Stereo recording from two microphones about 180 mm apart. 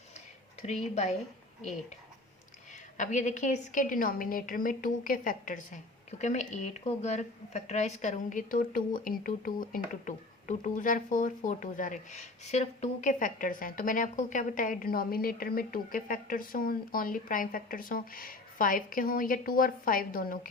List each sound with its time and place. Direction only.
3.0 s a woman's voice: 40° left (ahead or behind)